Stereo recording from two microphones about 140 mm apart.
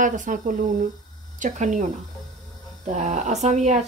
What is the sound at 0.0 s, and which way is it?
Speech, 65° right (ahead or behind).